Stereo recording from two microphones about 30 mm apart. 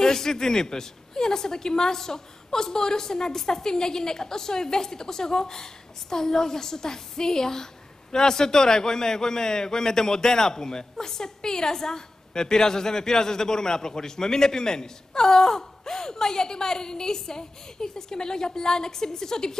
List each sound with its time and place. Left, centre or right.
0.0 s a man's voice: centre